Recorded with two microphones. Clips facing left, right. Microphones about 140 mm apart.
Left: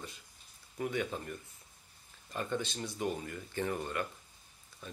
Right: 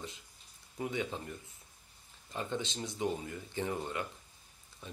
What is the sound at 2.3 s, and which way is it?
Speech, 20° right (ahead or behind).